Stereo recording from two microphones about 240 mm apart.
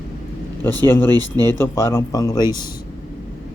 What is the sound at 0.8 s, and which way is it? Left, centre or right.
Speech, centre.